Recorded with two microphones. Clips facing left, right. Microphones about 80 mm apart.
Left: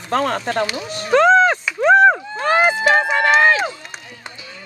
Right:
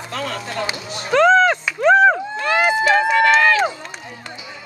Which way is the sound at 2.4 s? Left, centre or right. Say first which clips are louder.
Left 1 dB; left.